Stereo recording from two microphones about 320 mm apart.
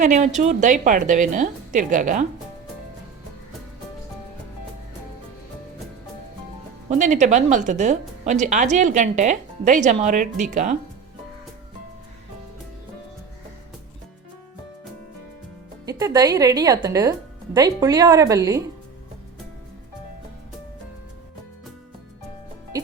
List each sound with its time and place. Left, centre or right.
0.0 s speech: right
6.9 s speech: right
15.9 s speech: centre